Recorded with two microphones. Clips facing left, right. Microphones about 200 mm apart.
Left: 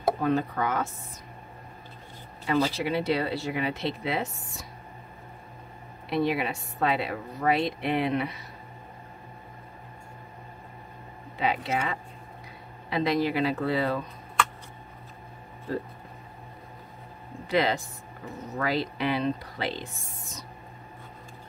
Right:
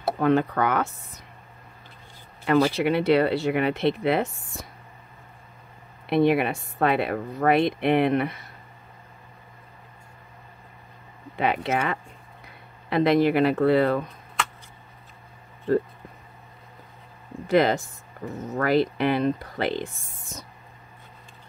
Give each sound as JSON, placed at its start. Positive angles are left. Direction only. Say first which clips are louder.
{"t": 0.2, "sound": "speech", "louder": "right 5 dB", "side_deg": -70}
{"t": 2.4, "sound": "a woman's voice", "louder": "right 5 dB", "side_deg": -60}
{"t": 6.0, "sound": "a woman's voice", "louder": "right 6 dB", "side_deg": -55}
{"t": 11.3, "sound": "a woman's voice", "louder": "right 3 dB", "side_deg": -60}
{"t": 17.5, "sound": "speech", "louder": "right 5 dB", "side_deg": -50}